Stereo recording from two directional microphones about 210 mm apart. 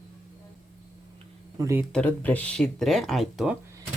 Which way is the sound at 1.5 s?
15° right (ahead or behind).